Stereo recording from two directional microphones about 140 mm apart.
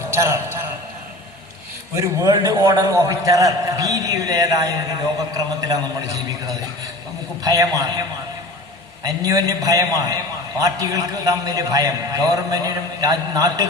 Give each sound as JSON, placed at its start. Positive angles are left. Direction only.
{"t": 0.1, "sound": "a man's voice", "side_deg": -20}
{"t": 2.0, "sound": "a man's voice", "side_deg": -25}
{"t": 9.0, "sound": "a man's voice", "side_deg": -25}